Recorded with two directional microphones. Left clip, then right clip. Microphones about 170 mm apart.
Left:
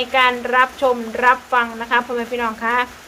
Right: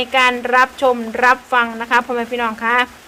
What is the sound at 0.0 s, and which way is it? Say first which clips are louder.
A woman's voice: right 1 dB; 30° right (ahead or behind).